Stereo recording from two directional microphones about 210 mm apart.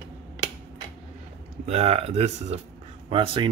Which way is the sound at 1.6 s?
30° right (ahead or behind).